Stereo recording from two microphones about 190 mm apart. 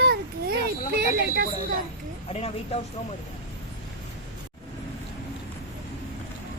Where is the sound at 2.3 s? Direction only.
30° left (ahead or behind).